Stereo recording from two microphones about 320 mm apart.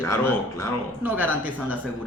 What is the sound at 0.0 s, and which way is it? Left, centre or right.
Speech, centre.